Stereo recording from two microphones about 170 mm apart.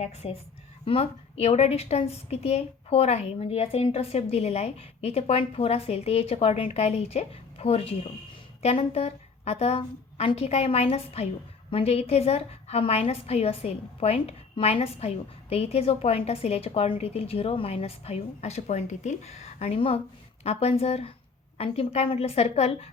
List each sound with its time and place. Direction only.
0.0 s a woman's voice: 40° left (ahead or behind)